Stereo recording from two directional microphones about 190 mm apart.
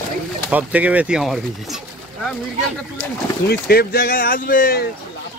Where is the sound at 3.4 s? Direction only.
55° left (ahead or behind).